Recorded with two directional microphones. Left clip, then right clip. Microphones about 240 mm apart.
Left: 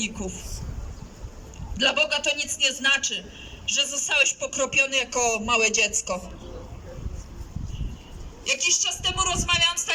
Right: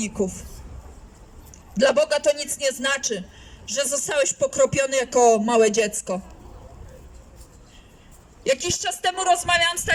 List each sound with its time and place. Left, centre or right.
0.0 s speech: right
1.7 s speech: right
8.4 s speech: right